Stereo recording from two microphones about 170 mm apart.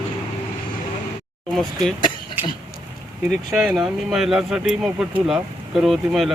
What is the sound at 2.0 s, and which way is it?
Throat clearing, 55° left (ahead or behind).